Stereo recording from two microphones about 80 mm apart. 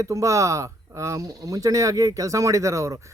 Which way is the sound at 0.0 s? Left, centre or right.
Right.